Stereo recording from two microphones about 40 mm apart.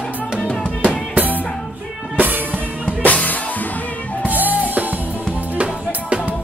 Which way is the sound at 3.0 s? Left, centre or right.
Left.